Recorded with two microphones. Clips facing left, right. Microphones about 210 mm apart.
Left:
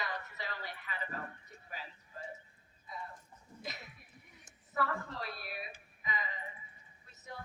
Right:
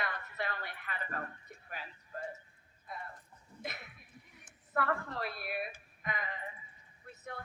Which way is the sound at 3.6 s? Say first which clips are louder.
Right 2 dB; 60° right (ahead or behind).